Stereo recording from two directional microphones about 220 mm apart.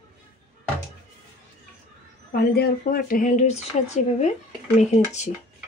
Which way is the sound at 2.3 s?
45° left (ahead or behind).